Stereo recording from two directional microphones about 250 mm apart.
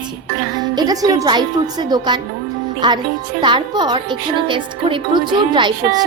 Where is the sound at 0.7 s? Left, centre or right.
Centre.